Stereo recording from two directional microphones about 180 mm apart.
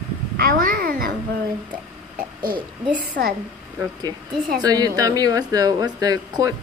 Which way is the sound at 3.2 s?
65° right (ahead or behind).